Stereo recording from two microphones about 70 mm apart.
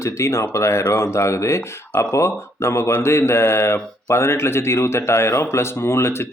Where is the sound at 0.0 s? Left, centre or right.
Left.